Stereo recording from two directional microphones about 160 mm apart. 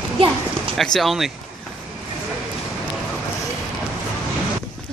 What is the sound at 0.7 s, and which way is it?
Speech, centre (ahead or behind).